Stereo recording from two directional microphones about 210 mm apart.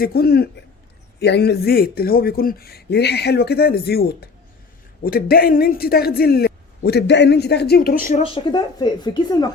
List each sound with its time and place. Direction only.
0.0 s speech: 45° left (ahead or behind)
8.2 s speech: 20° left (ahead or behind)